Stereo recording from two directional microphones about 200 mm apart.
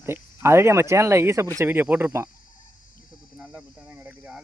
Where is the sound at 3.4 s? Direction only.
5° right (ahead or behind).